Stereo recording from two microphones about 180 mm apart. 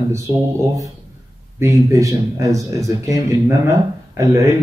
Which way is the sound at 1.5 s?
15° right (ahead or behind).